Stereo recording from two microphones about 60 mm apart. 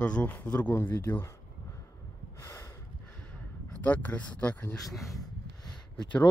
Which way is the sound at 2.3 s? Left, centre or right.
Left.